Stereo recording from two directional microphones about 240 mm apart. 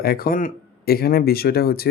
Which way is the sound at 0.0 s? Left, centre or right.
Left.